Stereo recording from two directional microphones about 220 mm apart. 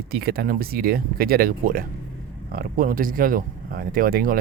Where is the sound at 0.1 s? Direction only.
45° right (ahead or behind).